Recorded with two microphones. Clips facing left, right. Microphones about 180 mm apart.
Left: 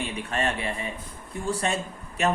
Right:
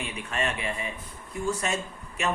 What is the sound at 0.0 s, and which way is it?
Speech, 35° left (ahead or behind).